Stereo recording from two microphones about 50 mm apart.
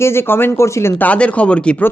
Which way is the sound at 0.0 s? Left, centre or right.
Left.